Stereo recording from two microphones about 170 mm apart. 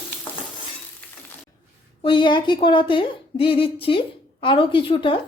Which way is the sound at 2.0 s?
30° left (ahead or behind).